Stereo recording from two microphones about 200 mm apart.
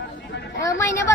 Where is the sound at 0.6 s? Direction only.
15° left (ahead or behind).